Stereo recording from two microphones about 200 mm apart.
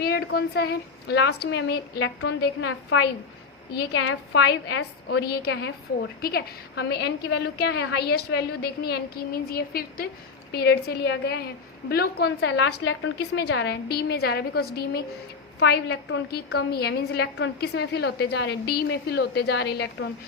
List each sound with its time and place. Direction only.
0.0 s a woman's voice: 55° left (ahead or behind)
3.7 s a woman's voice: 55° left (ahead or behind)
4.0 s a woman's voice: 70° left (ahead or behind)
13.1 s a woman's voice: 55° left (ahead or behind)